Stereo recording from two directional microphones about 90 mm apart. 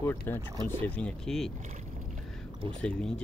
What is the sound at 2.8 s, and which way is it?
Speech, 10° left (ahead or behind).